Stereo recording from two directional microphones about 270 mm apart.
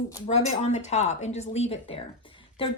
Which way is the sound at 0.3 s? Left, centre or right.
Left.